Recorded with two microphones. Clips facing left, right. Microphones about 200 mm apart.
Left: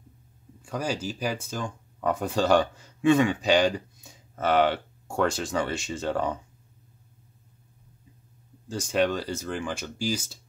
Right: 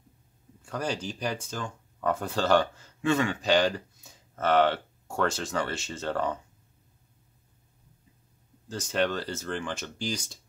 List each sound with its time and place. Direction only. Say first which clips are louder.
0.6 s speech: left 2 dB; 10° left (ahead or behind)
8.6 s speech: left 3 dB; 10° left (ahead or behind)